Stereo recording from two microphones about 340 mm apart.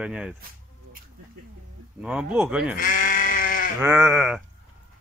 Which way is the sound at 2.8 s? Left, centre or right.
Left.